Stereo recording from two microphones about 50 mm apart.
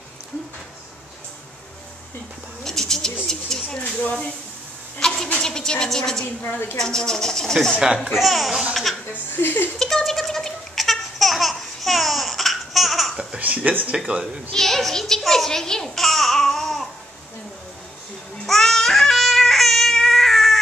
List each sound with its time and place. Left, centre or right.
2.6 s bird: centre
3.3 s a sound: centre
5.0 s a sound: centre
5.4 s a woman's voice: centre
6.4 s a woman's voice: left
6.8 s speech: centre
7.8 s speech: centre
8.2 s speech: centre
9.4 s speech: left
9.8 s babbling: centre
13.4 s speech: right
14.5 s a child's voice: centre
18.4 s babbling: centre